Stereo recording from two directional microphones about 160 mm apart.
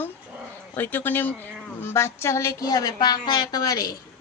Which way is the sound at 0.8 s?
10° left (ahead or behind).